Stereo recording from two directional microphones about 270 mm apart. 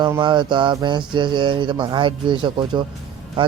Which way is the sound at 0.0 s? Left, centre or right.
Centre.